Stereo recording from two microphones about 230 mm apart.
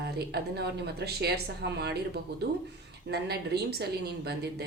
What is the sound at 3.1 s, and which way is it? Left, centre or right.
A woman's voice, right.